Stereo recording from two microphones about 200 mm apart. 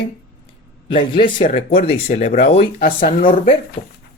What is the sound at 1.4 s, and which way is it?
Speech, 40° left (ahead or behind).